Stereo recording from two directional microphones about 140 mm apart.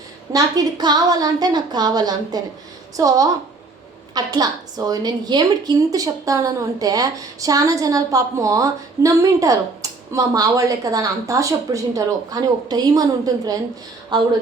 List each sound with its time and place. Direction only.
0.3 s a woman's voice: 25° right (ahead or behind)